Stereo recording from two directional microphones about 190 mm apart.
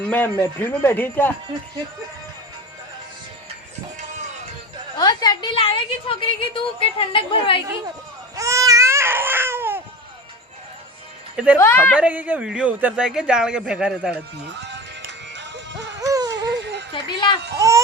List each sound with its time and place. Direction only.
0.1 s a man's voice: 10° left (ahead or behind)
4.2 s music: 40° right (ahead or behind)
4.9 s a woman's voice: 20° left (ahead or behind)
8.4 s baby cry: 15° right (ahead or behind)
11.6 s a man's voice: 10° left (ahead or behind)
11.9 s a man's voice: 5° right (ahead or behind)
15.4 s music: 70° right (ahead or behind)
16.0 s a sound: 20° right (ahead or behind)
16.9 s a sound: 25° left (ahead or behind)
17.6 s baby cry: 15° right (ahead or behind)